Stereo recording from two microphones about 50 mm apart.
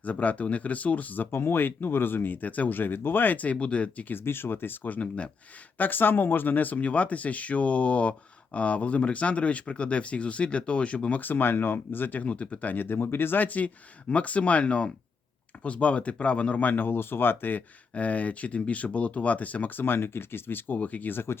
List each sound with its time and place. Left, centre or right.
0.0 s speech: left
1.3 s speech: left
4.1 s speech: left
4.9 s speech: left
5.7 s speech: left
11.2 s speech: left
12.2 s speech: left
12.7 s speech: left
17.9 s speech: left
19.8 s speech: left